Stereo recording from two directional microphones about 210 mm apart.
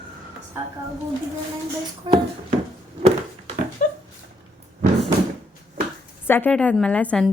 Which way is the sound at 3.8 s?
40° left (ahead or behind).